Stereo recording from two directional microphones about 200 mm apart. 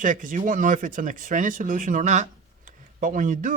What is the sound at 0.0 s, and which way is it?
Speech, 40° right (ahead or behind).